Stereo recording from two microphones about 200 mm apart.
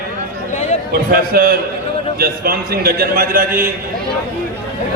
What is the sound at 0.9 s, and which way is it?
A man's voice, 50° right (ahead or behind).